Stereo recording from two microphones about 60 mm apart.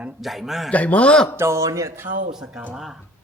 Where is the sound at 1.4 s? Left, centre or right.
Right.